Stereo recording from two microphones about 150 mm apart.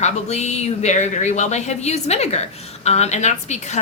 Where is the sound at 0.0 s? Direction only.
50° left (ahead or behind).